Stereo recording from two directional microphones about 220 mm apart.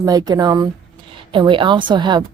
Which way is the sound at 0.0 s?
15° right (ahead or behind).